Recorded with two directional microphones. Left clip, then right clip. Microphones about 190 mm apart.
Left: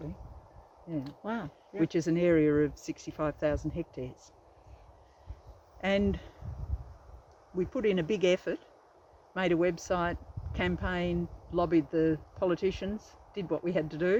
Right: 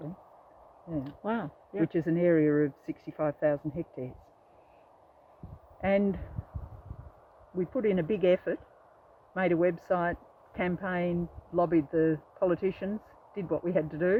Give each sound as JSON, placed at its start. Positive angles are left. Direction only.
{"t": 1.0, "sound": "speech", "side_deg": -20}
{"t": 1.9, "sound": "speech", "side_deg": -5}
{"t": 5.8, "sound": "speech", "side_deg": -15}
{"t": 7.7, "sound": "speech", "side_deg": -10}